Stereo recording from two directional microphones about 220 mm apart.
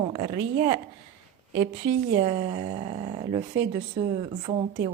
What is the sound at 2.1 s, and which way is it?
A woman's voice, 25° right (ahead or behind).